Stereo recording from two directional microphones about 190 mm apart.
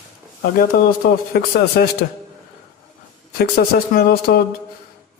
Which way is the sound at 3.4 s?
55° left (ahead or behind).